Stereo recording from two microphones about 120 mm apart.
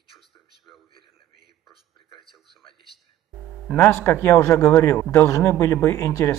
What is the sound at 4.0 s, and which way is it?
Speech, 25° left (ahead or behind).